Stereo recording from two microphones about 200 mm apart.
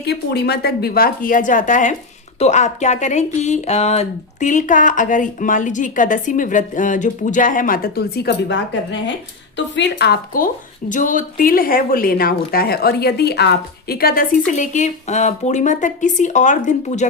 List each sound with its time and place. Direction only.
0.0 s speech: 55° left (ahead or behind); by 17.1 s 35° left (ahead or behind)